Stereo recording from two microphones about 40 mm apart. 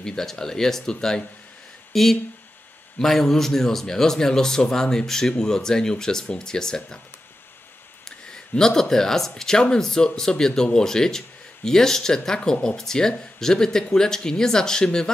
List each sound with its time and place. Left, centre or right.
0.0 s speech: centre
8.3 s speech: centre